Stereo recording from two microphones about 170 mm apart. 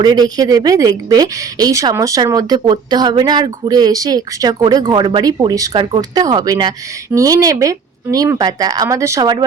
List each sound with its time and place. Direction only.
0.0 s speech: 25° right (ahead or behind)